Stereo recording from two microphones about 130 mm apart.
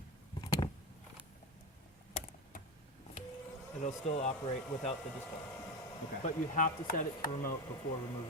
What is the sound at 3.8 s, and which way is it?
Speech, 60° left (ahead or behind).